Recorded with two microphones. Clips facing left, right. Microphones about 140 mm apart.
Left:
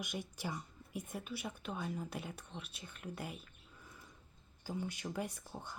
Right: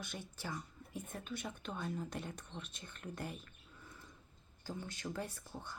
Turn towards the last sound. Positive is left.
turn(degrees=15)  # may be behind; listen again after turning